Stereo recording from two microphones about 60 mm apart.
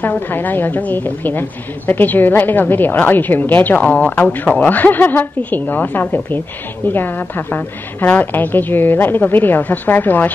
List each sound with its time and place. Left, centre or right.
0.0 s a woman's voice: left